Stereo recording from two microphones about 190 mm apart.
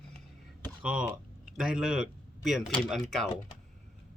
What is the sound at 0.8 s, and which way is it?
Speech, 5° right (ahead or behind).